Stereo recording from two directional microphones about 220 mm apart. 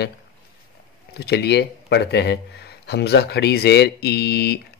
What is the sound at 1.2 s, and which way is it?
Speech, 50° left (ahead or behind).